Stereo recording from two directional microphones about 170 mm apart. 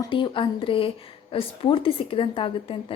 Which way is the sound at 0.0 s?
30° left (ahead or behind).